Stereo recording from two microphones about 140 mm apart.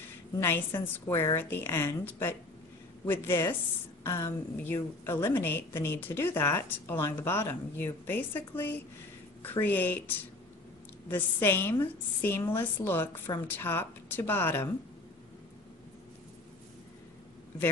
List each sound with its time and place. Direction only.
0.4 s a woman's voice: 15° left (ahead or behind)
11.1 s a woman's voice: 15° left (ahead or behind)